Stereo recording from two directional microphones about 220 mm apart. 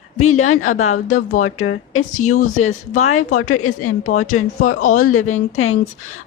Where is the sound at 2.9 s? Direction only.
75° left (ahead or behind).